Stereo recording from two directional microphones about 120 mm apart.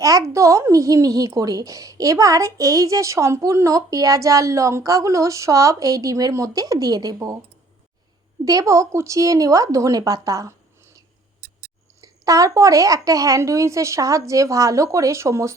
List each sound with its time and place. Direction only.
0.0 s speech: 30° right (ahead or behind)
8.4 s speech: 25° right (ahead or behind)
11.9 s speech: 30° right (ahead or behind)